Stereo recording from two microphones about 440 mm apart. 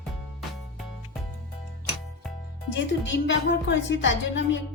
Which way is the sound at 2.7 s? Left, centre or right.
Left.